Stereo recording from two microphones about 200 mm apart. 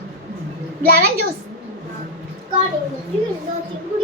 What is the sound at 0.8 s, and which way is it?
Speech, 50° right (ahead or behind).